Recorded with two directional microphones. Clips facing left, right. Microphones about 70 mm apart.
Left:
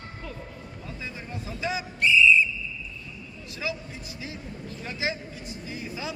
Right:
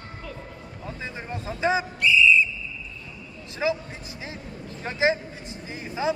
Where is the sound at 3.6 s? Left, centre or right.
Right.